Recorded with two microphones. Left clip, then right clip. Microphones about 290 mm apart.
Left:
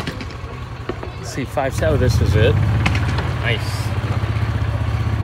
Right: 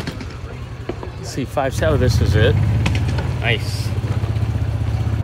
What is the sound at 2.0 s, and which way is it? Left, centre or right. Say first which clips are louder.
Speech: even; centre.